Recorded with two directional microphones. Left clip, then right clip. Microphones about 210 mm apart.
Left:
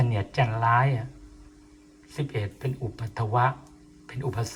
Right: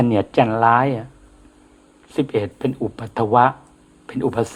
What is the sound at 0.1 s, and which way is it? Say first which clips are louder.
Speech: right 11 dB; 45° right (ahead or behind).